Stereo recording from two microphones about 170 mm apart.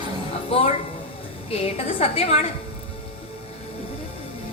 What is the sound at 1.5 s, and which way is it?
Speech, 35° left (ahead or behind).